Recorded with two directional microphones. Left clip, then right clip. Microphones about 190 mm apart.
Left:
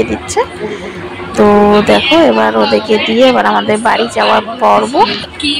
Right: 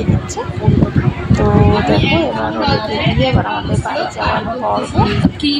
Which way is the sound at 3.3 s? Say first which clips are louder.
Left 8 dB; 20° left (ahead or behind).